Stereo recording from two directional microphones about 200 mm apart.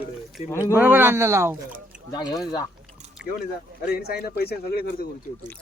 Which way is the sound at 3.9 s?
50° left (ahead or behind).